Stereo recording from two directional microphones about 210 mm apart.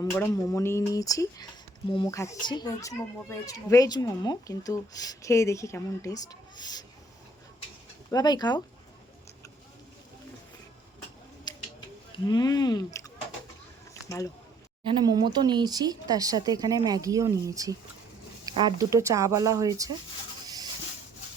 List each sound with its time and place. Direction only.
0.0 s speech: 15° left (ahead or behind)
8.1 s speech: 20° left (ahead or behind)
11.5 s scissors: 20° left (ahead or behind)
12.3 s speech: 20° left (ahead or behind)
13.9 s a sound: 15° left (ahead or behind)
14.8 s speech: 20° right (ahead or behind)